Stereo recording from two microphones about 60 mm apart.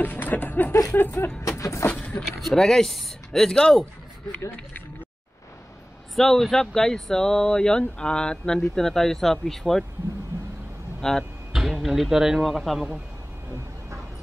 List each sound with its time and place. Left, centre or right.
0.0 s speech: left
1.6 s speech: left
1.9 s vehicle: centre
2.4 s speech: centre
6.1 s speech: centre
11.0 s speech: centre
11.5 s speech: centre